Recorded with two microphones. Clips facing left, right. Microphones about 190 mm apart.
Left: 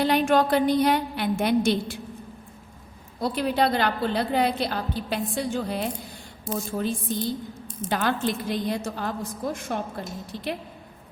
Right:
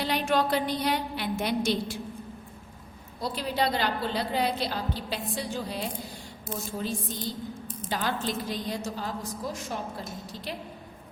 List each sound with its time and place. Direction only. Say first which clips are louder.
0.0 s a woman's voice: left 6 dB; 50° left (ahead or behind)
3.2 s a woman's voice: left 5 dB; 55° left (ahead or behind)